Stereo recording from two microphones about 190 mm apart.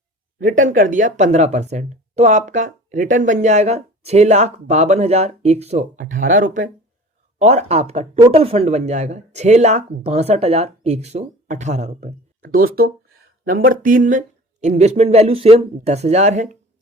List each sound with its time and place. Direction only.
0.3 s speech: 45° right (ahead or behind)